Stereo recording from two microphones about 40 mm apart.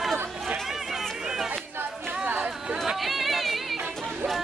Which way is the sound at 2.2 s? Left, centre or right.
Right.